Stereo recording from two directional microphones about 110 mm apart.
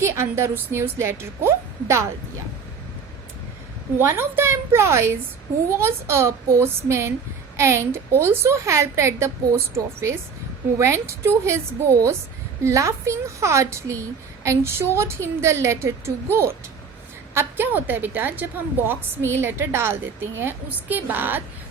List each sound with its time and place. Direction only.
0.0 s a woman's voice: 25° right (ahead or behind)
3.9 s a woman's voice: 20° right (ahead or behind)